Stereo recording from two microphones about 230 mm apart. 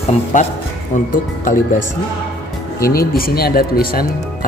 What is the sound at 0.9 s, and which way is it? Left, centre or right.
Speech, left.